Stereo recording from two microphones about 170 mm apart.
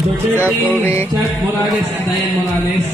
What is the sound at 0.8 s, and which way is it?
Speech, 15° left (ahead or behind).